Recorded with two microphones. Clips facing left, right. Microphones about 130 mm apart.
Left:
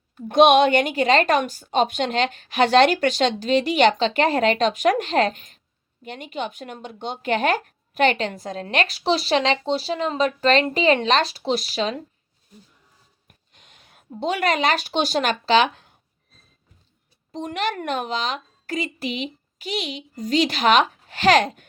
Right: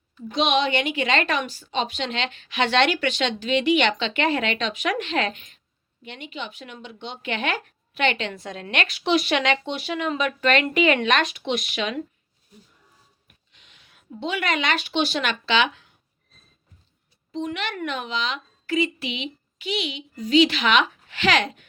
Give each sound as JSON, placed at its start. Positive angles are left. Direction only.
{"t": 0.2, "sound": "a woman's voice", "side_deg": 55}
{"t": 13.2, "sound": "a sound", "side_deg": 45}
{"t": 14.2, "sound": "speech", "side_deg": 40}
{"t": 17.3, "sound": "speech", "side_deg": 45}